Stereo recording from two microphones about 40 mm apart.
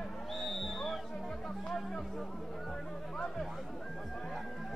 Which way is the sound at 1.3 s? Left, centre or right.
Centre.